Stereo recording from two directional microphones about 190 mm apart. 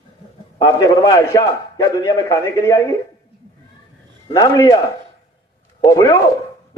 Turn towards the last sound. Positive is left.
turn(degrees=15)  # may be behind; listen again after turning